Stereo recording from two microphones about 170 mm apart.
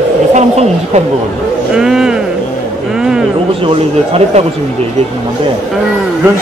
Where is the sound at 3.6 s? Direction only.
35° right (ahead or behind).